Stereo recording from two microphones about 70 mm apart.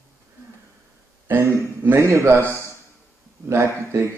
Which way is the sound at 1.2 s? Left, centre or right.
Right.